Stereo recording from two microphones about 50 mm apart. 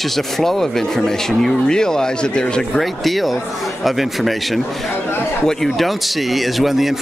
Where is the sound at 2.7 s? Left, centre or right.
Centre.